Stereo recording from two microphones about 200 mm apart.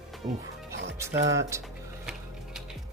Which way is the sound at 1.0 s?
15° right (ahead or behind).